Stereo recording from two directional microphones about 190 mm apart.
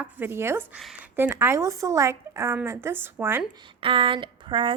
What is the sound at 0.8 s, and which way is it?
Speech, centre (ahead or behind).